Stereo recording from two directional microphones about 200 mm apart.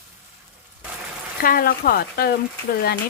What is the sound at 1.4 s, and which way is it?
Sizzle, 45° left (ahead or behind).